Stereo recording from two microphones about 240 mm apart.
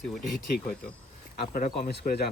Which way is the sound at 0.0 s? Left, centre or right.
Centre.